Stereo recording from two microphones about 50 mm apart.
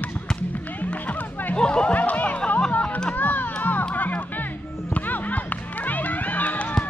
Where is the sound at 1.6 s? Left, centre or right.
Left.